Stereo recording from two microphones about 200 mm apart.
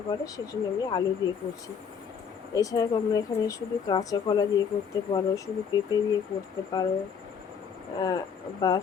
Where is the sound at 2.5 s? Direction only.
20° left (ahead or behind).